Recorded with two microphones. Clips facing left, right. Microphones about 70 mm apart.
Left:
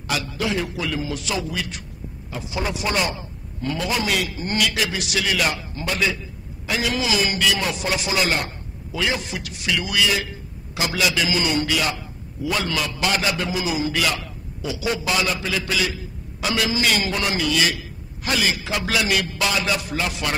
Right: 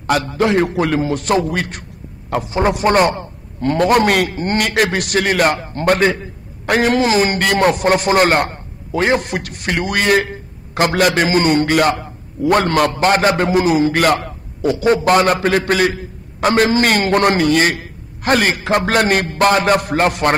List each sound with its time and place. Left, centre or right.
0.0 s a man's voice: right